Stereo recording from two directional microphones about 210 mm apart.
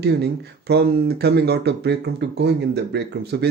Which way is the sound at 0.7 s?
50° right (ahead or behind).